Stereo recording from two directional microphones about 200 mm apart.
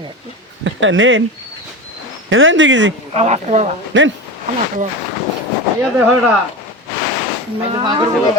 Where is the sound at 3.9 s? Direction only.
70° right (ahead or behind).